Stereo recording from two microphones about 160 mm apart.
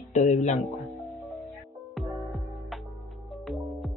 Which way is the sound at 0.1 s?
50° left (ahead or behind).